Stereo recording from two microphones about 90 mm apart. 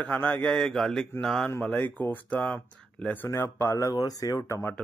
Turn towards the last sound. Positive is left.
turn(degrees=40)  # may be behind; listen again after turning